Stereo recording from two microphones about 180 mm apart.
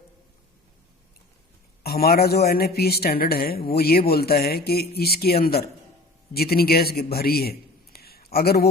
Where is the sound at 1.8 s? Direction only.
60° left (ahead or behind).